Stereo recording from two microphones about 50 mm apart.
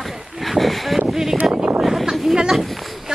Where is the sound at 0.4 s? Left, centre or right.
Centre.